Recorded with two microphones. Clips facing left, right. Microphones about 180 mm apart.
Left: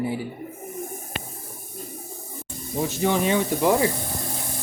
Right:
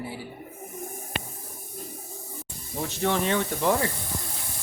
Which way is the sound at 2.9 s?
5° left (ahead or behind).